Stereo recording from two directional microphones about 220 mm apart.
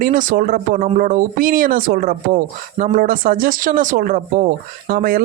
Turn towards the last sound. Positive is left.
turn(degrees=-40)  # may be behind; listen again after turning